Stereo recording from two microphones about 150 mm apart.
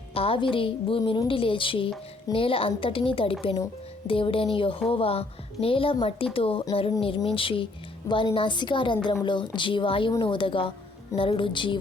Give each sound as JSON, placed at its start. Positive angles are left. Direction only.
{"t": 0.1, "sound": "a woman's voice", "side_deg": 40}